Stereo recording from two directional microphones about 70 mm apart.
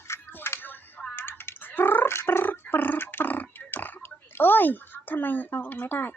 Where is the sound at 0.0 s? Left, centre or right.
Left.